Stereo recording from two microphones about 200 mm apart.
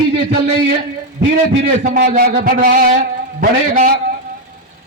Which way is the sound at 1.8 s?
50° right (ahead or behind).